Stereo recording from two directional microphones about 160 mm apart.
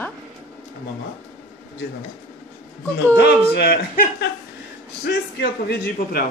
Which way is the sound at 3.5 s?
70° left (ahead or behind).